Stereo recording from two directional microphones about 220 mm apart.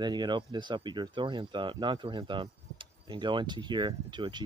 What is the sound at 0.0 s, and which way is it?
Speech, 20° right (ahead or behind).